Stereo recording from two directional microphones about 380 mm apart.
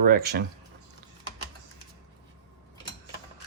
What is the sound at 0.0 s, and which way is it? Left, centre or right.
Speech, right.